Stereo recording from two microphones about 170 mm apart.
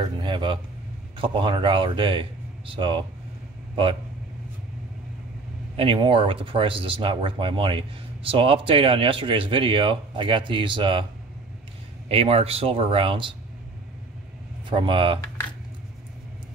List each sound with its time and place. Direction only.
0.2 s speech: 30° right (ahead or behind)
5.8 s speech: 30° right (ahead or behind)
12.1 s speech: 35° right (ahead or behind)
14.7 s speech: 30° right (ahead or behind)